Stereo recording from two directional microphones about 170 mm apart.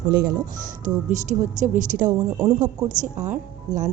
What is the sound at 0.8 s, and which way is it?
A woman's voice, 45° right (ahead or behind).